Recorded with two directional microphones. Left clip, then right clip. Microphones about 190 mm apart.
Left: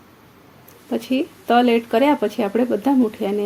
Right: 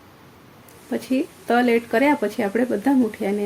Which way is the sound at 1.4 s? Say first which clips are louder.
Left 3 dB; 25° left (ahead or behind).